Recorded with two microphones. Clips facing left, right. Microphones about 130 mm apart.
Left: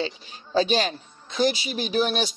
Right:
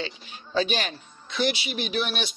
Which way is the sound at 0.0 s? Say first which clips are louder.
Left 4 dB; 35° left (ahead or behind).